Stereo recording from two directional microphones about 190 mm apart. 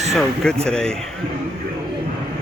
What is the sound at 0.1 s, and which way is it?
Speech, 5° left (ahead or behind).